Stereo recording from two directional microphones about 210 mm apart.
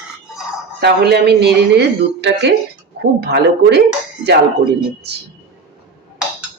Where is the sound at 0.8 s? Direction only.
50° right (ahead or behind).